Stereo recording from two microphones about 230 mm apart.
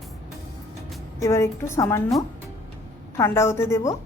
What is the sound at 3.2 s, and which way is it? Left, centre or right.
Speech, centre.